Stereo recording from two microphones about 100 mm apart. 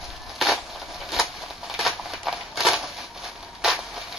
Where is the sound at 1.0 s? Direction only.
Centre (ahead or behind).